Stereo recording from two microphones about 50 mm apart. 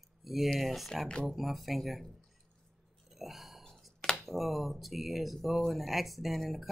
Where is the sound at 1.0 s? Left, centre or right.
Centre.